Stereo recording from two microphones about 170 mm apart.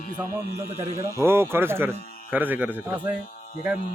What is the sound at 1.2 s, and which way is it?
A man's voice, 15° right (ahead or behind).